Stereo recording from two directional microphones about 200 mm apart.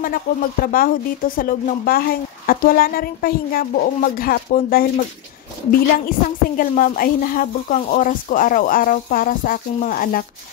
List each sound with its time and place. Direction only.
0.0 s speech: 45° left (ahead or behind)